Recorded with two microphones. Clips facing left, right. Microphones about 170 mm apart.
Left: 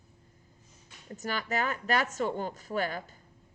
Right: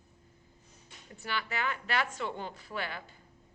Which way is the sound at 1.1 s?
45° left (ahead or behind).